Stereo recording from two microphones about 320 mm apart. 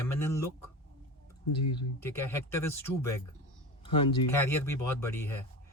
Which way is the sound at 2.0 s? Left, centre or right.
Centre.